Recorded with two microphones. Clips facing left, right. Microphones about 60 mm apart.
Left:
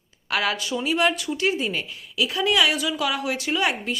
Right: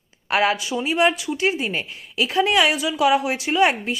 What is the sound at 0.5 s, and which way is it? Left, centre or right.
Speech, centre.